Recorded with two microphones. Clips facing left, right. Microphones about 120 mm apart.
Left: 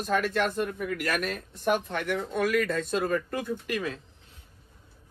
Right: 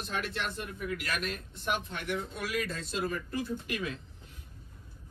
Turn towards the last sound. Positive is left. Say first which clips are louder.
# left 4 dB
turn(degrees=45)  # may be behind; listen again after turning